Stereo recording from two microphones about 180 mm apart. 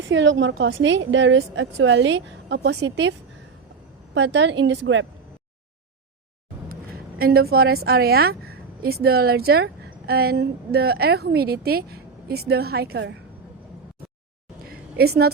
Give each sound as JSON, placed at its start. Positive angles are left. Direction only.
{"t": 0.1, "sound": "a woman's voice", "side_deg": -90}
{"t": 7.2, "sound": "a woman's voice", "side_deg": -60}
{"t": 14.6, "sound": "a sound", "side_deg": -60}